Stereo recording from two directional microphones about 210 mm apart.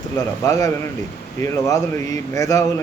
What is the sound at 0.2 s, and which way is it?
A man's voice, 15° left (ahead or behind).